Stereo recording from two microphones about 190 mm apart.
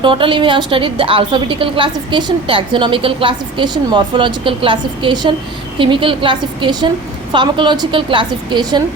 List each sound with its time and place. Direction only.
0.0 s a woman's voice: 25° right (ahead or behind)